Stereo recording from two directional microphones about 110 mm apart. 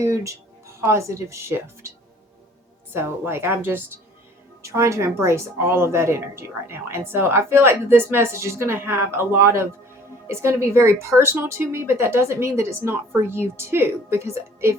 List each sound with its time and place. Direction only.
0.0 s speech: 25° right (ahead or behind)
2.9 s a woman's voice: 20° right (ahead or behind)